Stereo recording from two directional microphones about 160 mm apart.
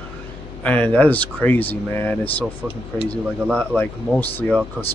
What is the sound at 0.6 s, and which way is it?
Speech, 10° left (ahead or behind).